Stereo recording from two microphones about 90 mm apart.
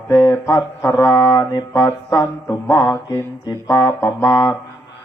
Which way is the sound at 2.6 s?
25° left (ahead or behind).